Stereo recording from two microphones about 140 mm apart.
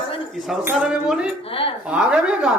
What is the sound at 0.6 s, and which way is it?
Speech, 10° right (ahead or behind).